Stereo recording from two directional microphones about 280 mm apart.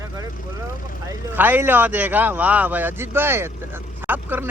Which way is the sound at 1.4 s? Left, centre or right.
Centre.